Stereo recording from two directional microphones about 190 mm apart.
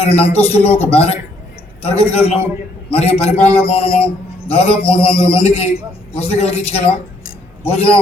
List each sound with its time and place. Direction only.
0.0 s a man's voice: 30° left (ahead or behind)
3.4 s a man's voice: 10° left (ahead or behind)
3.7 s a man's voice: 30° left (ahead or behind)